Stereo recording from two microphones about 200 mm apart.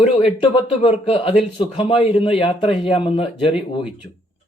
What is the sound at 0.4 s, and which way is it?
A man's voice, 25° left (ahead or behind).